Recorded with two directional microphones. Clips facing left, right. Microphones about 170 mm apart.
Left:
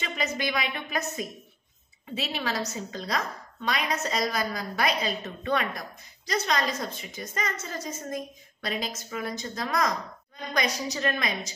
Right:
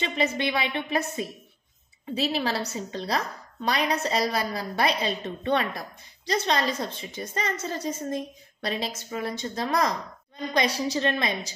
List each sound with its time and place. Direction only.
0.0 s a woman's voice: 30° right (ahead or behind)